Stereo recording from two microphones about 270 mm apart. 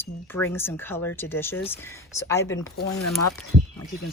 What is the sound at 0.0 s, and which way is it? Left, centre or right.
A woman's voice, centre.